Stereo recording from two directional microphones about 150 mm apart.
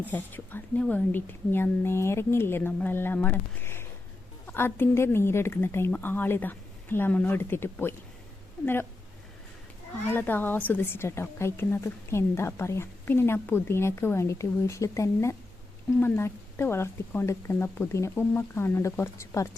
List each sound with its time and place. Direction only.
0.0 s a woman's voice: 10° left (ahead or behind)
10.1 s a woman's voice: 15° left (ahead or behind)